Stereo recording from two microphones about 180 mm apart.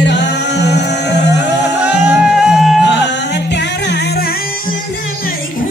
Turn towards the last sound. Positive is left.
turn(degrees=70)  # may be behind; listen again after turning